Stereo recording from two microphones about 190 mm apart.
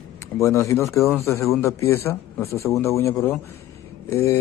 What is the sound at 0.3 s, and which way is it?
Speech, 15° left (ahead or behind).